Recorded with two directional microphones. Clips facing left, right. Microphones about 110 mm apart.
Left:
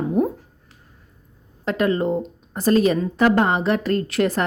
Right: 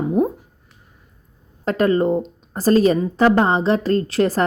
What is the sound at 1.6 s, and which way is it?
A woman's voice, 40° right (ahead or behind).